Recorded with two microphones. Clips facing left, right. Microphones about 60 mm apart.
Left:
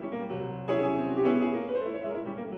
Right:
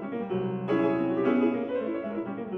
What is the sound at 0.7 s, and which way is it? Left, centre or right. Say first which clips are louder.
Music: right 1 dB; centre.